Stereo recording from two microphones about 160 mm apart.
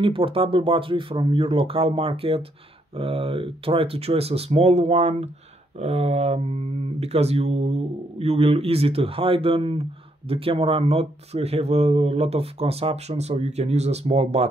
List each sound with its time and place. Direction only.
0.0 s speech: 35° right (ahead or behind)